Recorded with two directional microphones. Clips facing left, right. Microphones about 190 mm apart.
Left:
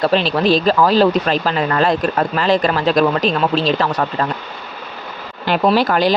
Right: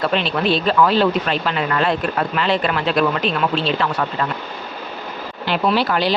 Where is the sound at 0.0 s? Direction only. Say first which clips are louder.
Left 4 dB; 35° left (ahead or behind).